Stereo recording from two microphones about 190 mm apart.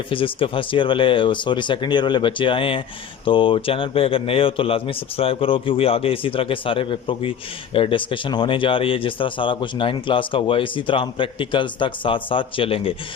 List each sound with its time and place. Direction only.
0.1 s speech: 25° left (ahead or behind)